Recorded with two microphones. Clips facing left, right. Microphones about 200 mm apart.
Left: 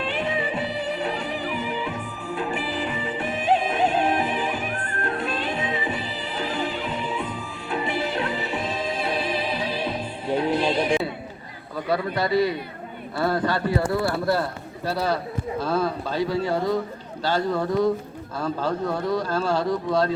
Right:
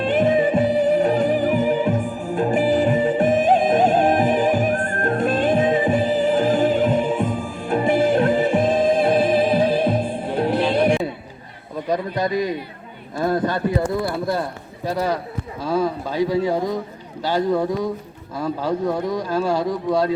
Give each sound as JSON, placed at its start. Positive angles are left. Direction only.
{"t": 0.0, "sound": "music", "side_deg": -45}
{"t": 11.9, "sound": "a man's voice", "side_deg": -15}